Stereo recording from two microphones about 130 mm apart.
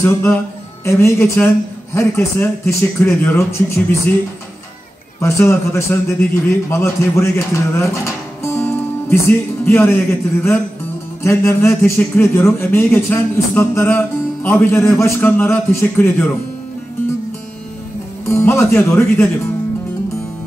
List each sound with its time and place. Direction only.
0.0 s a man's voice: 20° left (ahead or behind)
5.2 s a man's voice: 20° left (ahead or behind)
18.2 s speech: 20° left (ahead or behind)